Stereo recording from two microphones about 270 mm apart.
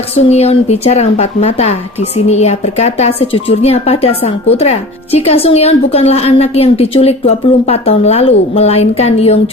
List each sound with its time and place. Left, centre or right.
0.3 s speech: left